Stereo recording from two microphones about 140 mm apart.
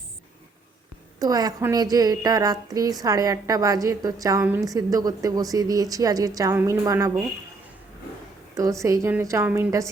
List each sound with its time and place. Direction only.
1.2 s speech: 25° right (ahead or behind)
8.8 s speech: 20° right (ahead or behind)